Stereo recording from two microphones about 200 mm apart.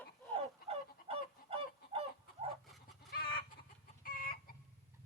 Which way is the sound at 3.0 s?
50° left (ahead or behind).